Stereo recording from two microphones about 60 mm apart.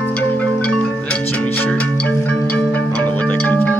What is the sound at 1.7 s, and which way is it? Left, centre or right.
Marimba, centre.